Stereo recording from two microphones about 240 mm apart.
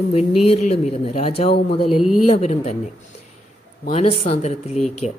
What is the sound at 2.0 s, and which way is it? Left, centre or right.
Speech, centre.